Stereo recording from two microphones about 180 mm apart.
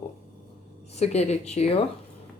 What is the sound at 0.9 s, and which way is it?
Speech, 35° left (ahead or behind).